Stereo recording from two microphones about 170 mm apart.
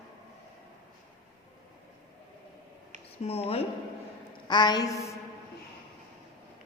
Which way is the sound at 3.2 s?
35° left (ahead or behind).